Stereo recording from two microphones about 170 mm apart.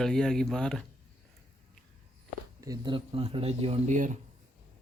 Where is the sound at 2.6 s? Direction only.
25° right (ahead or behind); by 4.1 s 45° right (ahead or behind).